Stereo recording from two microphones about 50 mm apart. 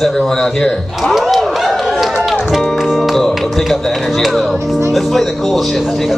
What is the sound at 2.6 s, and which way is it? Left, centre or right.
Music, centre.